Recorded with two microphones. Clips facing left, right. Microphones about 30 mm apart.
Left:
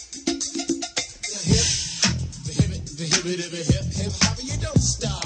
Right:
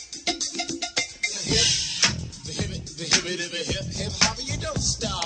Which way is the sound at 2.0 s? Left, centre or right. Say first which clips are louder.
Left 1 dB; centre.